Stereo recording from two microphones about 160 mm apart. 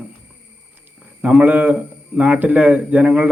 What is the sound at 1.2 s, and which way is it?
A man's voice, 10° right (ahead or behind).